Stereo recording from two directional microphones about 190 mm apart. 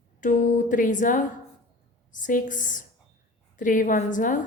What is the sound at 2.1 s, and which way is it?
A woman's voice, 45° left (ahead or behind).